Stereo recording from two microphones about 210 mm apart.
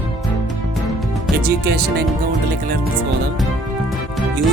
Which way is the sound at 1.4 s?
45° right (ahead or behind).